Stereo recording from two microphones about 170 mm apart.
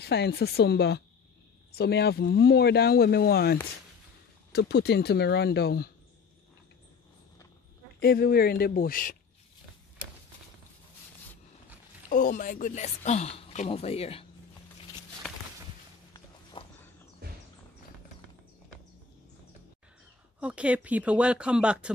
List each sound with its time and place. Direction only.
0.0 s speech: 75° left (ahead or behind)
4.5 s speech: 75° left (ahead or behind)
8.0 s speech: 65° left (ahead or behind)
12.1 s speech: 50° left (ahead or behind)
15.2 s walk: centre (ahead or behind)
16.6 s walk: 30° left (ahead or behind)
17.2 s horse: 70° right (ahead or behind)
20.3 s speech: 5° right (ahead or behind)